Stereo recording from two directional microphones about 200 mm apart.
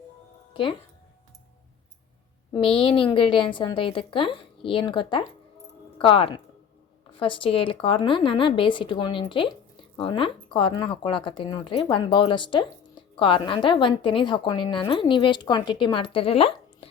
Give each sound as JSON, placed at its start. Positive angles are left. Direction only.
{"t": 2.5, "sound": "a woman's voice", "side_deg": 25}